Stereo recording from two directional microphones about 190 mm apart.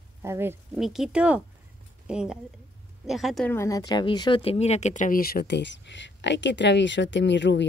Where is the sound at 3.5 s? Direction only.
15° left (ahead or behind).